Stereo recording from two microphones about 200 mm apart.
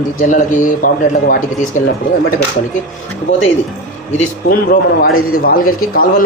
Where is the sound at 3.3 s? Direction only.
75° left (ahead or behind).